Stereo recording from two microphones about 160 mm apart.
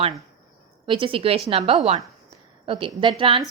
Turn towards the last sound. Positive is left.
turn(degrees=-35)  # may be behind; listen again after turning